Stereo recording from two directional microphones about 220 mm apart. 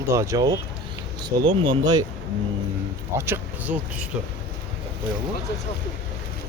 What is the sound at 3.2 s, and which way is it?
Speech, 10° right (ahead or behind).